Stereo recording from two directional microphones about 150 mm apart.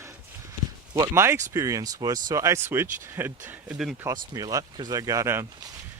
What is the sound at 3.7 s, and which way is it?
Speech, centre (ahead or behind).